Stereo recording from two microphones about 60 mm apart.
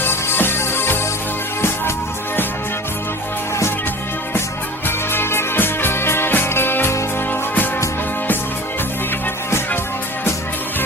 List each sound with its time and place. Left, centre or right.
0.0 s music: left
4.9 s music: left